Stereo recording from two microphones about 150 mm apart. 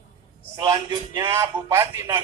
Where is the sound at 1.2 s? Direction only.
20° right (ahead or behind).